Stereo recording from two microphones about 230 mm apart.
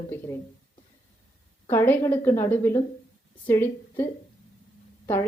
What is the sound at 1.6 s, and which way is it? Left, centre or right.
A woman's voice, centre.